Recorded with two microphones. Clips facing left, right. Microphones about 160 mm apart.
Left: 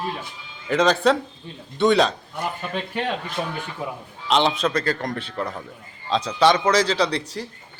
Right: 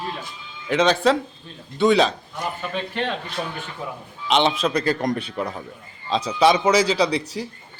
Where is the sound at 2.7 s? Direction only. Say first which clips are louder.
Even; 10° left (ahead or behind).